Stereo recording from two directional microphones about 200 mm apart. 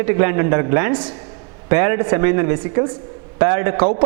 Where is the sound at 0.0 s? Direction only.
15° right (ahead or behind).